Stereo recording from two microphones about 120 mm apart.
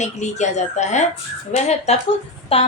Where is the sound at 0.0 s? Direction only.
80° left.